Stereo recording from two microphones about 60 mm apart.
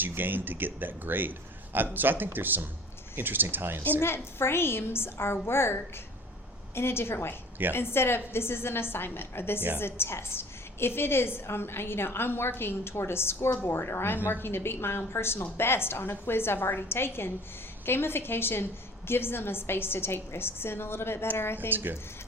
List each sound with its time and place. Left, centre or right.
0.0 s a man's voice: right
4.0 s a woman's voice: left
21.7 s a man's voice: right